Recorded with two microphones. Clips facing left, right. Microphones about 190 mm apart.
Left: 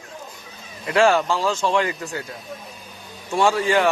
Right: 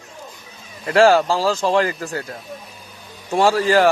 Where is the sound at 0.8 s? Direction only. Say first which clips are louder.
Right 4 dB; 35° right (ahead or behind).